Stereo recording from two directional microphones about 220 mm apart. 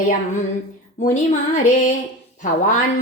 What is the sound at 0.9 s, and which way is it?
Speech, 35° left (ahead or behind).